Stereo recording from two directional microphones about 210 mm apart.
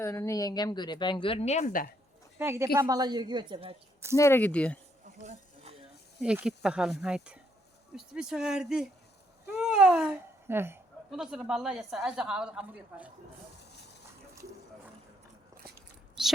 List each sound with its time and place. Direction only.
0.0 s a woman's voice: 15° left (ahead or behind); by 1.9 s 40° left (ahead or behind)
2.4 s a woman's voice: 10° right (ahead or behind)
4.2 s speech: 10° left (ahead or behind)
5.2 s a sound: 35° right (ahead or behind)
6.1 s a woman's voice: 5° right (ahead or behind)
15.6 s a sound: 45° right (ahead or behind)